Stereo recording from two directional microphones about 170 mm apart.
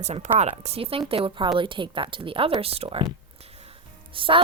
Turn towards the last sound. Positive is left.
turn(degrees=-30)  # may be behind; listen again after turning